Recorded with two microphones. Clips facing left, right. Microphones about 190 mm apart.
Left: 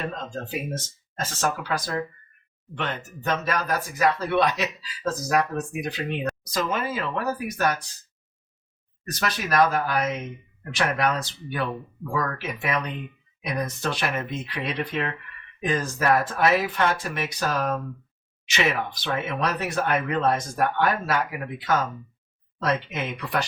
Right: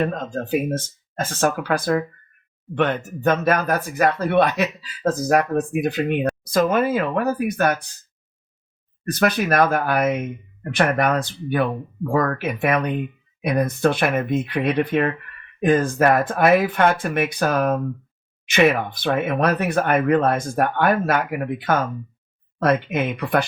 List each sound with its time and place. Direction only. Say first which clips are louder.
0.0 s speech: right 8 dB; 55° right (ahead or behind)
9.1 s speech: right 4 dB; 55° right (ahead or behind)